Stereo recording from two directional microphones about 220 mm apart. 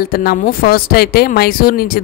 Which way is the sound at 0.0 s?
45° left (ahead or behind).